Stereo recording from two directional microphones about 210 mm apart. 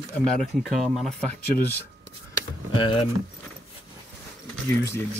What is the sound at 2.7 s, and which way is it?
Speech, 25° left (ahead or behind).